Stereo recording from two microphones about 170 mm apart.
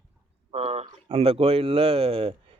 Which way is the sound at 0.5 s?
40° right (ahead or behind).